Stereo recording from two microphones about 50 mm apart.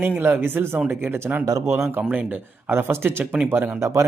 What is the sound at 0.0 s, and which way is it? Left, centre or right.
Speech, right.